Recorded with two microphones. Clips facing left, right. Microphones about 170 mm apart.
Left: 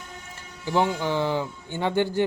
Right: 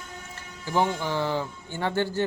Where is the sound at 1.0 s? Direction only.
15° left (ahead or behind).